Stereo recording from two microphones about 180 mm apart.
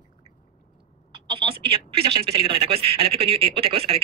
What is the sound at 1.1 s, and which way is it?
Speech, 30° right (ahead or behind).